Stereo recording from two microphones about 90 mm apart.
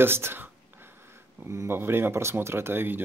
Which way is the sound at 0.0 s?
25° right (ahead or behind).